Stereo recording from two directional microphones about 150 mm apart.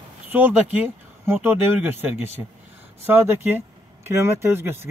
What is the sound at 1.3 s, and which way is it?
Speech, 15° right (ahead or behind).